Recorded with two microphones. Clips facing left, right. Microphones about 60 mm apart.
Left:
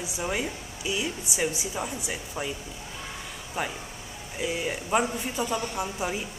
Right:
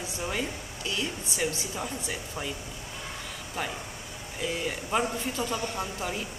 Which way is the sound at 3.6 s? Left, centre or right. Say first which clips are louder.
Left 2 dB; centre.